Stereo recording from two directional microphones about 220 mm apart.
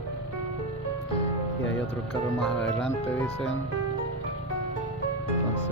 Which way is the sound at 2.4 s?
5° left (ahead or behind).